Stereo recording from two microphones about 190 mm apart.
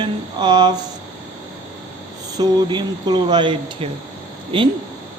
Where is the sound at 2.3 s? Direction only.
20° right (ahead or behind).